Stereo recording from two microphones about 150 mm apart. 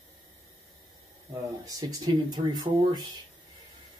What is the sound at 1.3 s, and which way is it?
Speech, 25° right (ahead or behind).